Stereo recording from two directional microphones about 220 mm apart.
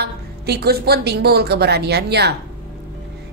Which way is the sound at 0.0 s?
45° right (ahead or behind).